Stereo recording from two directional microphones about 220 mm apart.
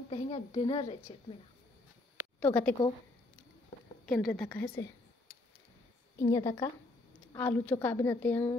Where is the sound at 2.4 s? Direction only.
5° left (ahead or behind).